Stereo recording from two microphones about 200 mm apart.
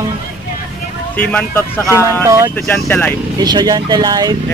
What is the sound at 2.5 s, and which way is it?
Speech, 10° left (ahead or behind).